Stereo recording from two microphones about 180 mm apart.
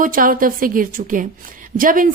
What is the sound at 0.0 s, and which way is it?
Speech, 50° right (ahead or behind).